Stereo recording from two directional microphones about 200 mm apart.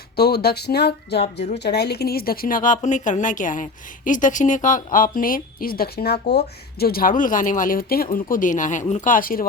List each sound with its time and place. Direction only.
0.2 s speech: 55° left (ahead or behind)